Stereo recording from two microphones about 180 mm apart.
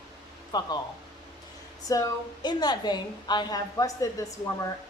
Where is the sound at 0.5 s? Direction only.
20° left (ahead or behind).